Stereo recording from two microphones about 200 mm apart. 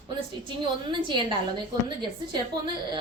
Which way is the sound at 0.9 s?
25° right (ahead or behind).